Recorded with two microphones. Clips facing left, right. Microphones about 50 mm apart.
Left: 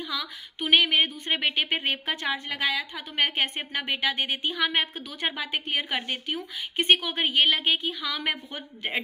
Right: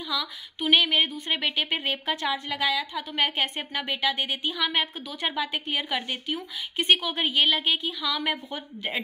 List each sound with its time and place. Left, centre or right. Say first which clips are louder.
0.1 s speech: right 2 dB; left